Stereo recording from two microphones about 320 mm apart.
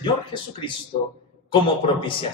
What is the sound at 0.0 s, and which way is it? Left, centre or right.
A man's voice, centre.